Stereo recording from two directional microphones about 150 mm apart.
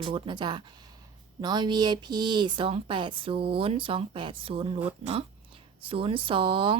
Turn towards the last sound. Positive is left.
turn(degrees=-35)  # may be behind; listen again after turning